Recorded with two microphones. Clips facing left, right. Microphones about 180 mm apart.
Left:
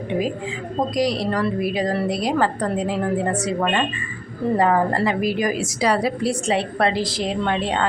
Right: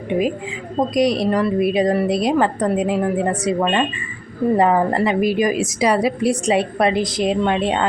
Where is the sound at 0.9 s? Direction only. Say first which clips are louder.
Right 5 dB; 20° right (ahead or behind).